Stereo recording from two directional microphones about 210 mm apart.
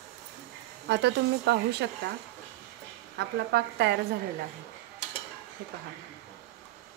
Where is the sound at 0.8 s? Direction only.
55° right (ahead or behind).